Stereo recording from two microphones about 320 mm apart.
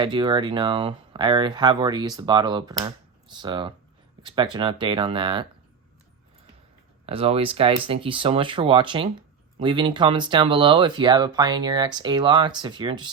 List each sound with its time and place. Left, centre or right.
0.0 s speech: centre
7.0 s speech: centre